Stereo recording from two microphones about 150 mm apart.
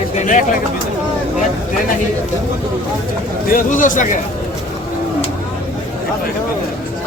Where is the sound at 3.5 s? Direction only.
60° left (ahead or behind).